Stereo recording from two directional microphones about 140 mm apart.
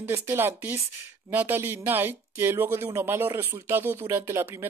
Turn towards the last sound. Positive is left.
turn(degrees=-20)  # may be behind; listen again after turning